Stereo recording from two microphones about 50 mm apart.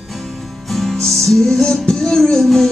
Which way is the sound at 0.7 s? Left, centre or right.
Centre.